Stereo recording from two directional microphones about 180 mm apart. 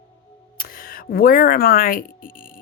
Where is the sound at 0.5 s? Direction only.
55° left (ahead or behind).